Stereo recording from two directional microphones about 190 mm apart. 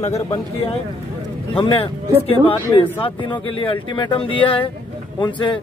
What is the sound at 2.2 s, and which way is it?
Speech, 30° left (ahead or behind).